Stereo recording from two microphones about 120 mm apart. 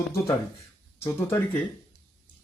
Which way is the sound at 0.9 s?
20° left (ahead or behind).